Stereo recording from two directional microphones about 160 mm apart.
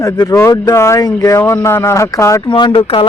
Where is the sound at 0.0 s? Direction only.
20° left (ahead or behind).